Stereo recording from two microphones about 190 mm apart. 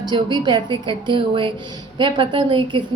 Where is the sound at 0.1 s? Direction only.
25° right (ahead or behind).